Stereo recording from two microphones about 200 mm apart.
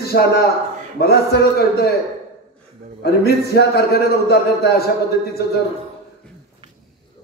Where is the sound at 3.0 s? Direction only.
55° left (ahead or behind).